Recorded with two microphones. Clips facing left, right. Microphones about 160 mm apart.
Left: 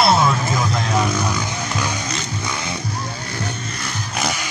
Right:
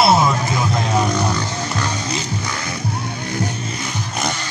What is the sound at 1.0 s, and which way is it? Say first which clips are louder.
Music: right 2 dB; 10° left (ahead or behind).